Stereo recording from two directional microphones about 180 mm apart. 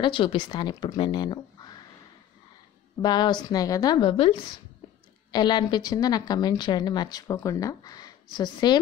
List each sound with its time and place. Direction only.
0.0 s speech: 30° left (ahead or behind)
3.0 s speech: 25° left (ahead or behind)